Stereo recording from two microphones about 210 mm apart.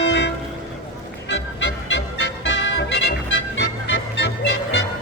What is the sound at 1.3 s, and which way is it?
Music, 60° left (ahead or behind).